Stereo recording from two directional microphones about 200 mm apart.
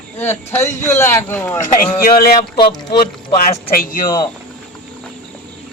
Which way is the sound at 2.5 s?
20° left (ahead or behind).